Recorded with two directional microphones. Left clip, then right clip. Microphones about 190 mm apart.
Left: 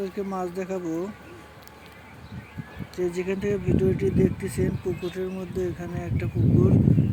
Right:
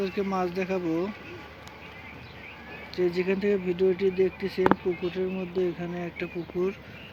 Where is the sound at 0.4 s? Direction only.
10° left (ahead or behind).